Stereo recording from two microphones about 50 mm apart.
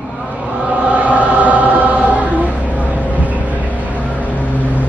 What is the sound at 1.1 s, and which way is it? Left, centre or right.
Choir, right.